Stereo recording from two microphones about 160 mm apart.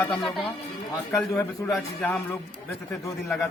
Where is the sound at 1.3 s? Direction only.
20° left (ahead or behind).